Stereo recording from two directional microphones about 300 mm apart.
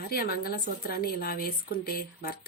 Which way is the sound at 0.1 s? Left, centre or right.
Left.